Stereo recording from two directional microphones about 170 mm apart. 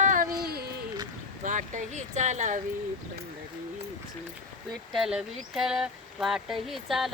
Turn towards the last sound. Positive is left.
turn(degrees=0)  # may be behind; listen again after turning